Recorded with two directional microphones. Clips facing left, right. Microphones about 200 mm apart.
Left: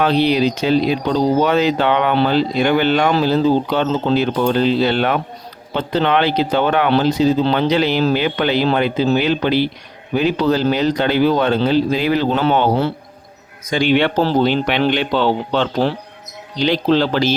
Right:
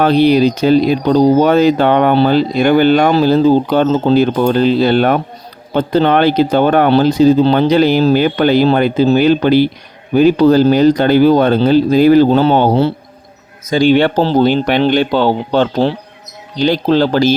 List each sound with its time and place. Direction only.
0.0 s speech: 45° right (ahead or behind)
14.4 s speech: 45° right (ahead or behind)